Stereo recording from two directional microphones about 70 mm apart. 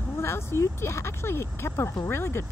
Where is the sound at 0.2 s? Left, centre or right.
Left.